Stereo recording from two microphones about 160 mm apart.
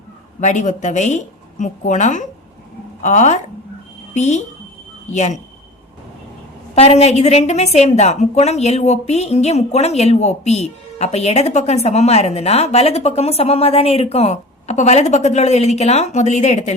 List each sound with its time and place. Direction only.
0.3 s a woman's voice: 50° left (ahead or behind)
6.7 s a woman's voice: 40° left (ahead or behind)